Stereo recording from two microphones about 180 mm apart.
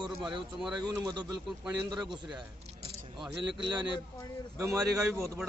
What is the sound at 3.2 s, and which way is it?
Speech, 25° right (ahead or behind).